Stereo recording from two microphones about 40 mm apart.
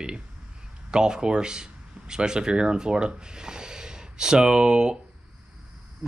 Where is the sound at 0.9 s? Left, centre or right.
Centre.